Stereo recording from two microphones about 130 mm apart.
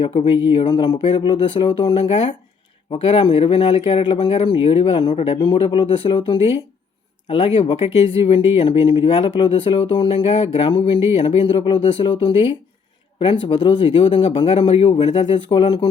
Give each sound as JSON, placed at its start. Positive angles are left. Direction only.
{"t": 0.0, "sound": "speech", "side_deg": 50}